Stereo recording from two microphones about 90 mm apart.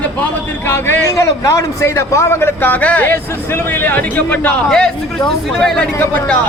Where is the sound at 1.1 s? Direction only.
40° left (ahead or behind); by 5.9 s 5° left (ahead or behind).